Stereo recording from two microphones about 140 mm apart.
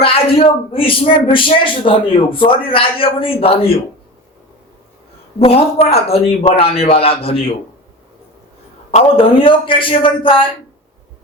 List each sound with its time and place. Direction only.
0.0 s speech: 45° left (ahead or behind)
5.4 s a man's voice: 45° left (ahead or behind)
8.9 s speech: 45° left (ahead or behind)